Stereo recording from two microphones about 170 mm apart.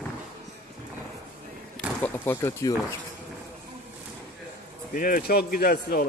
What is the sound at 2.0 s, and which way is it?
Speech, 10° left (ahead or behind).